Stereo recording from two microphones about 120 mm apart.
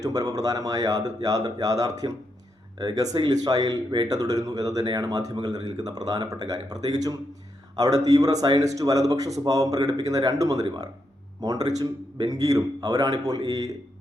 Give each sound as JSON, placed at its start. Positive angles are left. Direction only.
{"t": 0.0, "sound": "a man's voice", "side_deg": -30}